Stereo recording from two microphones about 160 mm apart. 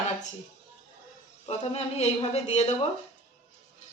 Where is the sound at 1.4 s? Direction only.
40° left (ahead or behind).